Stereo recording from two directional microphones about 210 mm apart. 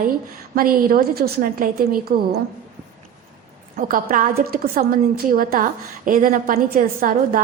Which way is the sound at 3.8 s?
40° right (ahead or behind).